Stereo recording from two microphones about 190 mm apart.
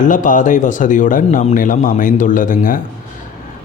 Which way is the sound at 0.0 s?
45° left (ahead or behind).